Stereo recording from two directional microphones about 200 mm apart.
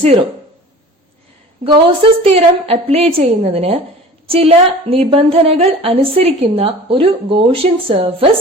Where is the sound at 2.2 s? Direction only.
30° right (ahead or behind).